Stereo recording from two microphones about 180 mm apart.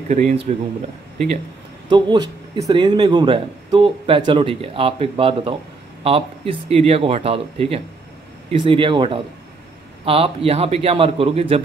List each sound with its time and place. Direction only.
0.1 s speech: 40° right (ahead or behind)
1.9 s speech: 25° right (ahead or behind)